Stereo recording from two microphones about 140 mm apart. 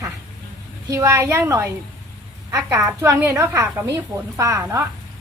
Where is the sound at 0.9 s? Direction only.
20° right (ahead or behind).